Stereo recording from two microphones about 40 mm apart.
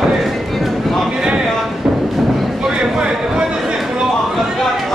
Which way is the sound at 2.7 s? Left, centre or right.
Right.